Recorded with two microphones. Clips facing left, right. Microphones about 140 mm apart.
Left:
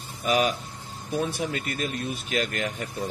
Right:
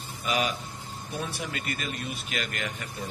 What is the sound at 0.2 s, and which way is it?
Speech, 50° left (ahead or behind).